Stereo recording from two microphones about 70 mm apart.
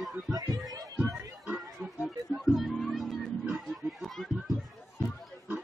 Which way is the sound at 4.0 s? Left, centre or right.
Centre.